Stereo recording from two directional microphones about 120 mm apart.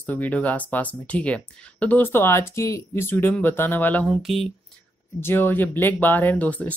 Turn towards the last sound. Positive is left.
turn(degrees=15)  # may be behind; listen again after turning